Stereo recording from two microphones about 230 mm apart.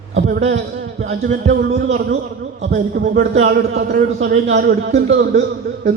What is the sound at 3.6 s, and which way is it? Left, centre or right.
Speech, right.